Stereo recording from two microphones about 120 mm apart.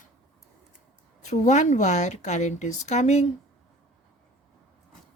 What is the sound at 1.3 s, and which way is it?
Speech, 85° left.